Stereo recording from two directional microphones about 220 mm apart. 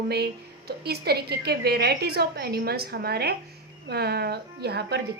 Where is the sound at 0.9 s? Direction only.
45° right (ahead or behind).